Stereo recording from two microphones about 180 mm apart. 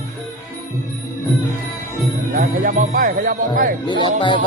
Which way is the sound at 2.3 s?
45° right (ahead or behind).